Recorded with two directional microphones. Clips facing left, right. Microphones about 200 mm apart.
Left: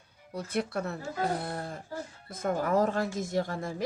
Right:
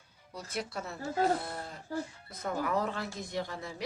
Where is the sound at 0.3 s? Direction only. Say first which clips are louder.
Left 6 dB; 55° left (ahead or behind).